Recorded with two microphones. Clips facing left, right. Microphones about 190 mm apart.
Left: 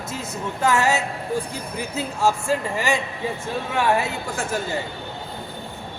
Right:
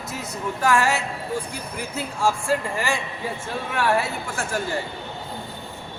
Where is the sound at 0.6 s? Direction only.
20° left (ahead or behind).